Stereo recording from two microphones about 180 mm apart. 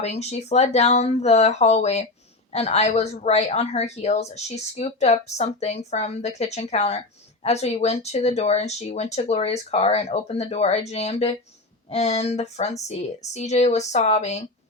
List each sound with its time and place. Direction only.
0.0 s a woman's voice: 35° left (ahead or behind)